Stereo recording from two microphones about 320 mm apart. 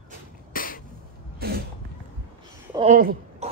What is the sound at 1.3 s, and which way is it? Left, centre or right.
Throat clearing, right.